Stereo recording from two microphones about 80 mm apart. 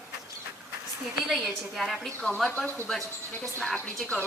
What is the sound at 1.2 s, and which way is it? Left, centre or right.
A woman's voice, centre.